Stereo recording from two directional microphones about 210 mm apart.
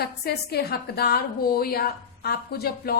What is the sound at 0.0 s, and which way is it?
A woman's voice, 50° left (ahead or behind).